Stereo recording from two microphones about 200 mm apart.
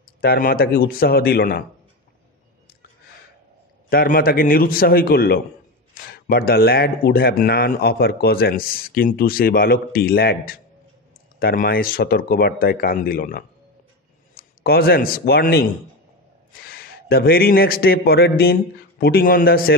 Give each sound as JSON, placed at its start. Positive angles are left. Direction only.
{"t": 0.2, "sound": "speech", "side_deg": 50}
{"t": 3.9, "sound": "a man's voice", "side_deg": 45}